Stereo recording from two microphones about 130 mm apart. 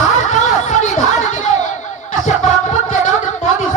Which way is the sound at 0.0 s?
65° left (ahead or behind).